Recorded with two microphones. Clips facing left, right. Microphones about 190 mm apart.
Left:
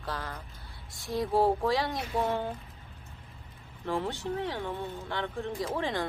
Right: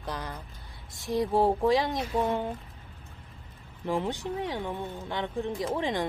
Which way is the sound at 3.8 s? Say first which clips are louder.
Right 2 dB; 15° right (ahead or behind).